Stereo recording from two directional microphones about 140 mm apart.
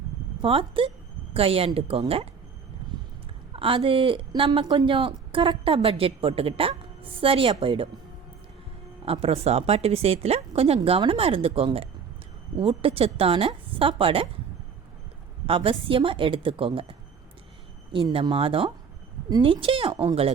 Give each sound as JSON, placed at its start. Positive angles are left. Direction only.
{"t": 0.4, "sound": "speech", "side_deg": -40}
{"t": 3.5, "sound": "speech", "side_deg": -40}
{"t": 9.2, "sound": "speech", "side_deg": -45}
{"t": 15.4, "sound": "speech", "side_deg": -40}
{"t": 18.1, "sound": "speech", "side_deg": -40}